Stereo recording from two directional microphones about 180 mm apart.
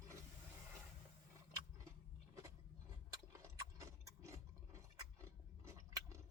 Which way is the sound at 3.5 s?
15° right (ahead or behind).